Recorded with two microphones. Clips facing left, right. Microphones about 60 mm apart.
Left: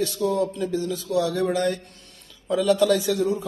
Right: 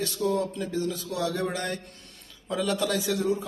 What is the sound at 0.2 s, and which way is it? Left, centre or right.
Speech, centre.